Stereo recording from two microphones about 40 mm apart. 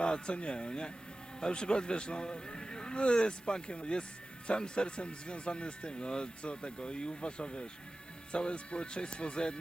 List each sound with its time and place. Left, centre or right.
0.0 s speech: left